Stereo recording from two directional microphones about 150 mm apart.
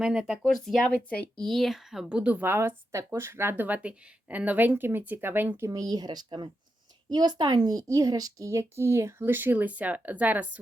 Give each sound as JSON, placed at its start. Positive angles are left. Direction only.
{"t": 0.0, "sound": "speech", "side_deg": -5}